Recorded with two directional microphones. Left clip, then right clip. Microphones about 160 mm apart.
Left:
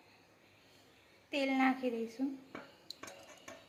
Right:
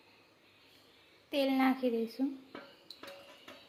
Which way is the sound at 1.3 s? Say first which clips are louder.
Right 2 dB; 45° right (ahead or behind).